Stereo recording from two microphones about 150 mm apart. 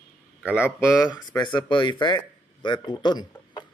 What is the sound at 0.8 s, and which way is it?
Speech, 25° left (ahead or behind).